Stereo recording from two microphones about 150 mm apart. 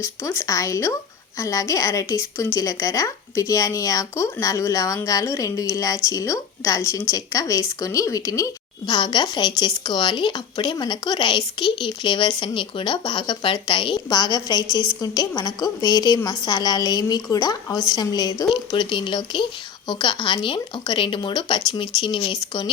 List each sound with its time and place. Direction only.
0.0 s a woman's voice: 20° left (ahead or behind)